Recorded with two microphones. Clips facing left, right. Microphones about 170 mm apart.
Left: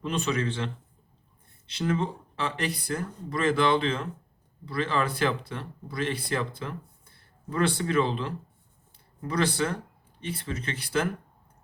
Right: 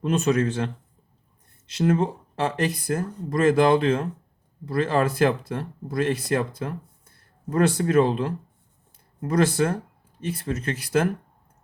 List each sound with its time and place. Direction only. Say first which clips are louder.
0.0 s speech: right 7 dB; 45° right (ahead or behind)
1.7 s speech: right 6 dB; 45° right (ahead or behind)